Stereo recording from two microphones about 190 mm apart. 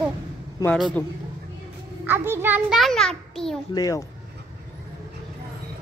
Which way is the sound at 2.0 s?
10° right (ahead or behind).